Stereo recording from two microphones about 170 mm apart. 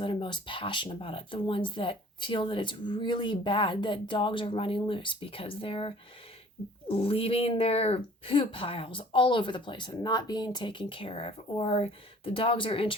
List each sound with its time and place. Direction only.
0.0 s speech: 30° left (ahead or behind)